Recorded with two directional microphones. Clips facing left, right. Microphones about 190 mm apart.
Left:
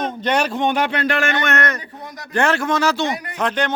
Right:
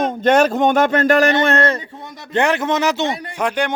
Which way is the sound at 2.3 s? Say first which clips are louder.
Right 2 dB; 20° right (ahead or behind).